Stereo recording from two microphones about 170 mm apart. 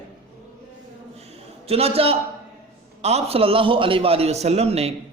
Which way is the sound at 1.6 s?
35° right (ahead or behind).